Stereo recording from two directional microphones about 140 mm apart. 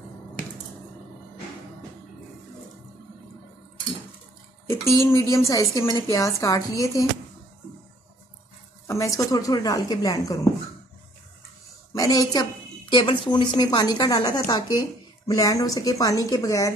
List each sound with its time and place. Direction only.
4.6 s a woman's voice: 20° left (ahead or behind)
8.8 s a woman's voice: 20° left (ahead or behind)
11.9 s a woman's voice: 25° left (ahead or behind)